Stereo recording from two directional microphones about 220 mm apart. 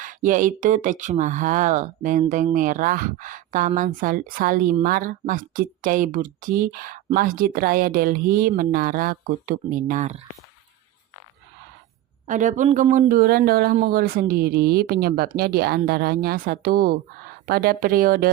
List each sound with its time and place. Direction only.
0.0 s a woman's voice: 35° right (ahead or behind)
12.3 s a woman's voice: 35° right (ahead or behind)